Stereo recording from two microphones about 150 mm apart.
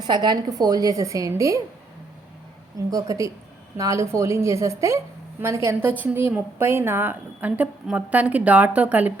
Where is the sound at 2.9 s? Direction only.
20° right (ahead or behind).